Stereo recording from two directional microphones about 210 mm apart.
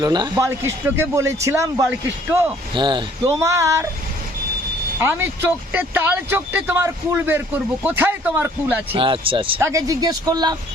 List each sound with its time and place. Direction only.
0.0 s speech: 20° right (ahead or behind)
4.9 s speech: 10° right (ahead or behind)
8.9 s speech: 25° right (ahead or behind)
9.6 s speech: 15° right (ahead or behind)